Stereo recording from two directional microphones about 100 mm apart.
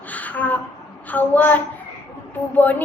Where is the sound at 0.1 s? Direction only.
15° left (ahead or behind).